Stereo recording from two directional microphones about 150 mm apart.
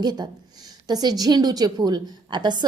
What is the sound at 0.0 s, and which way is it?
A woman's voice, 30° right (ahead or behind).